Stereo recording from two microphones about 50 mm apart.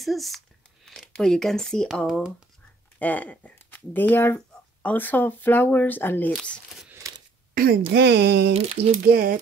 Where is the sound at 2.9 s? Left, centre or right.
Left.